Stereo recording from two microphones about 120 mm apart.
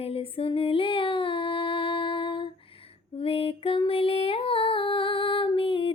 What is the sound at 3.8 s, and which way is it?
Female singing, 50° left (ahead or behind).